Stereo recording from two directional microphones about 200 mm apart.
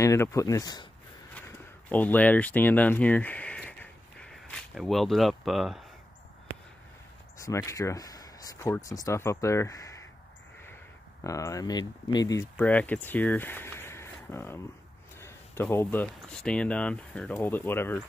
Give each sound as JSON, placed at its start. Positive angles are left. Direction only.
{"t": 0.0, "sound": "speech", "side_deg": 15}
{"t": 1.9, "sound": "speech", "side_deg": 10}
{"t": 7.3, "sound": "speech", "side_deg": 15}
{"t": 11.2, "sound": "speech", "side_deg": 15}
{"t": 12.5, "sound": "speech", "side_deg": 5}